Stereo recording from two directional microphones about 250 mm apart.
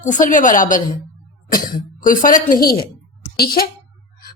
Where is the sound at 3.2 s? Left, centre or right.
Left.